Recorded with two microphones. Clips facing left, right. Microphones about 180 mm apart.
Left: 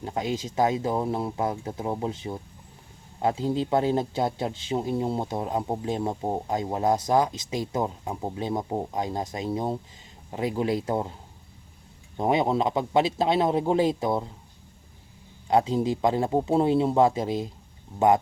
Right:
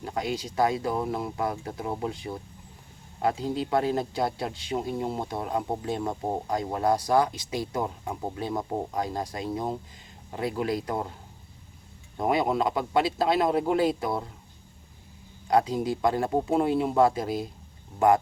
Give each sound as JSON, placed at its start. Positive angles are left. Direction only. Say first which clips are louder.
{"t": 0.0, "sound": "speech", "louder": "left 2 dB", "side_deg": 25}
{"t": 12.1, "sound": "speech", "louder": "left 2 dB", "side_deg": 25}
{"t": 15.4, "sound": "speech", "louder": "left 2 dB", "side_deg": 25}